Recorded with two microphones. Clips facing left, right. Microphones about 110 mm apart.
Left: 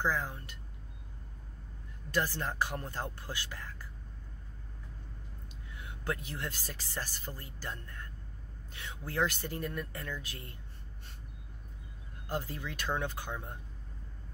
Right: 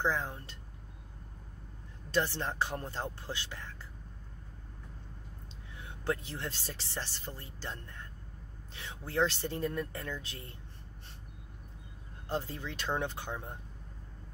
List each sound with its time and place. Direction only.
0.0 s speech: 25° right (ahead or behind)
2.0 s speech: 25° right (ahead or behind)
5.8 s speech: 25° right (ahead or behind)
12.3 s speech: 25° right (ahead or behind)